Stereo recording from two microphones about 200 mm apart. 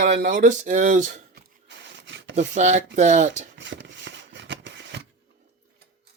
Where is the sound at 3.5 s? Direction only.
65° right (ahead or behind).